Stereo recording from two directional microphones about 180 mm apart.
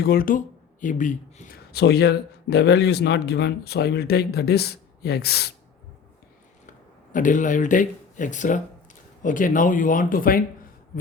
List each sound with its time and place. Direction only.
0.0 s speech: 55° left (ahead or behind)
1.7 s speech: 65° left (ahead or behind)
7.1 s speech: 45° left (ahead or behind)